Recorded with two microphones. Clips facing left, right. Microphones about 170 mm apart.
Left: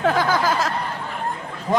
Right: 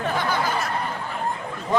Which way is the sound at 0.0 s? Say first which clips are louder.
Left 5 dB; 90° left.